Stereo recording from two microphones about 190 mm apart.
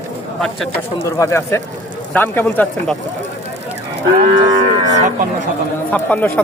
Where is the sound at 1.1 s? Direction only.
15° left (ahead or behind).